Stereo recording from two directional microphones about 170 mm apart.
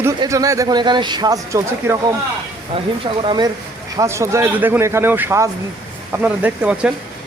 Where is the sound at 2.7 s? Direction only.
30° right (ahead or behind).